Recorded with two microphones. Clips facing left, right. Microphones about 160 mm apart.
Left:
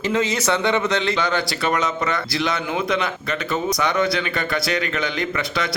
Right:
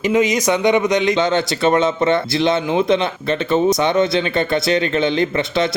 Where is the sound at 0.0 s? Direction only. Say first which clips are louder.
Right 5 dB; 15° right (ahead or behind).